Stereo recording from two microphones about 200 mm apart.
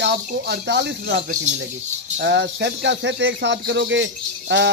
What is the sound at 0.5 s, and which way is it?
Speech, 60° right (ahead or behind).